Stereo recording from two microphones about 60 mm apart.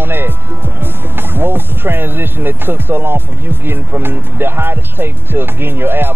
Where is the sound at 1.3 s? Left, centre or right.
Right.